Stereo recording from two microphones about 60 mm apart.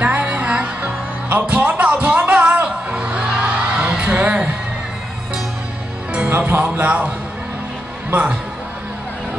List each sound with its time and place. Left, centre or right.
0.0 s music: right
6.3 s music: right
6.7 s a man's voice: right
8.1 s a man's voice: right